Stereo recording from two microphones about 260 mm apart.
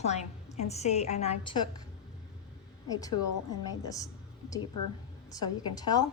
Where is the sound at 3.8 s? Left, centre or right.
Centre.